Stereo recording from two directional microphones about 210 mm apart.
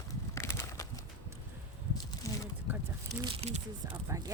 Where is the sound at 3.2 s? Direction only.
25° right (ahead or behind).